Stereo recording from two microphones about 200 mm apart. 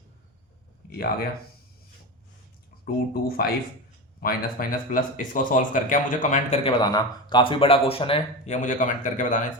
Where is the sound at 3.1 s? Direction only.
50° left (ahead or behind).